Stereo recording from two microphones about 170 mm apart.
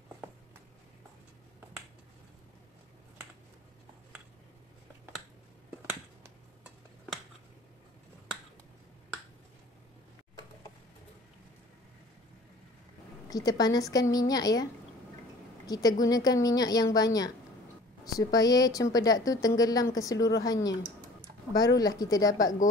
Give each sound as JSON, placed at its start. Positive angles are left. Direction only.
{"t": 13.3, "sound": "a woman's voice", "side_deg": 20}